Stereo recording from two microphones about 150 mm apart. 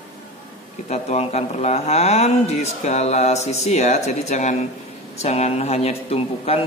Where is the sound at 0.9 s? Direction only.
45° left (ahead or behind).